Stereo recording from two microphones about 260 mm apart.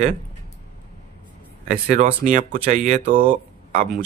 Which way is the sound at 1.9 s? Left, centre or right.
Right.